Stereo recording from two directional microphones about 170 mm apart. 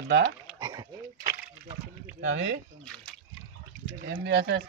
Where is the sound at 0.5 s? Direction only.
25° right (ahead or behind).